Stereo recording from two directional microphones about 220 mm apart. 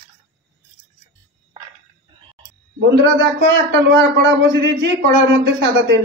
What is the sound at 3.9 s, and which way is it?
A man's voice, 50° right (ahead or behind).